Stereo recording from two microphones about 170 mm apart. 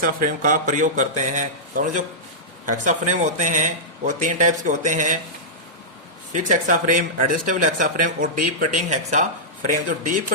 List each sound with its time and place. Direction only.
0.0 s speech: 50° right (ahead or behind)
6.3 s speech: 50° right (ahead or behind)